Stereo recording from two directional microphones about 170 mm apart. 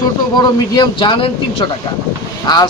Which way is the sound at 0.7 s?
30° left (ahead or behind).